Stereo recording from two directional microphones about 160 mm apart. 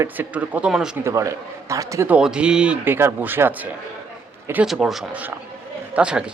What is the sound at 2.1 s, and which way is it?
Speech, 5° right (ahead or behind).